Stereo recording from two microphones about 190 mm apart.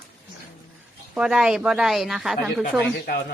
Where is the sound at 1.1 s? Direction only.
5° right (ahead or behind).